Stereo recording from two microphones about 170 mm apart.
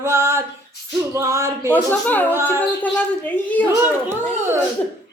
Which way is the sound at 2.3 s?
15° right (ahead or behind).